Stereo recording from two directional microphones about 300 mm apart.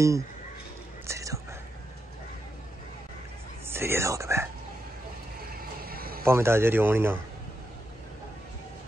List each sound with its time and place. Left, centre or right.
1.0 s whispering: centre
3.6 s whispering: centre
5.5 s a sound: right
6.2 s speech: centre